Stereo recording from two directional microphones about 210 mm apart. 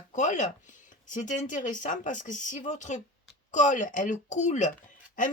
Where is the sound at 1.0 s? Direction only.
40° left (ahead or behind).